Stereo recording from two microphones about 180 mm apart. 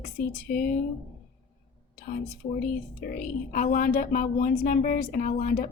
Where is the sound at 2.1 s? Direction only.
45° left (ahead or behind).